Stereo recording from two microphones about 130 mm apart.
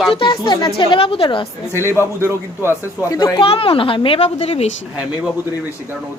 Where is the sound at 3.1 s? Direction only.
40° left (ahead or behind).